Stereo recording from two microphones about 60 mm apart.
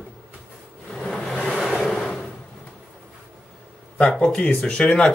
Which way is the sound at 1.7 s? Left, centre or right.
Centre.